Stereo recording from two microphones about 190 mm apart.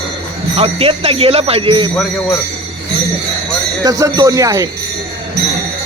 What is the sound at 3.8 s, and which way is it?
Speech, 20° right (ahead or behind).